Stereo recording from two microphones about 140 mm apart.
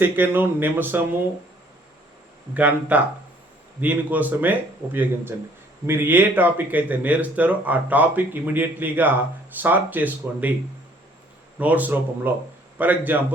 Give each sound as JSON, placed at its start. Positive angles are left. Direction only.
{"t": 0.0, "sound": "speech", "side_deg": -15}
{"t": 2.6, "sound": "speech", "side_deg": -10}
{"t": 11.6, "sound": "speech", "side_deg": -10}